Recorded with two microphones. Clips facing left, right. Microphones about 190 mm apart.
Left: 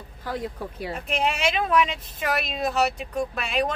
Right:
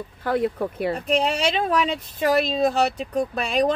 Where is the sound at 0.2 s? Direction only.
60° right (ahead or behind).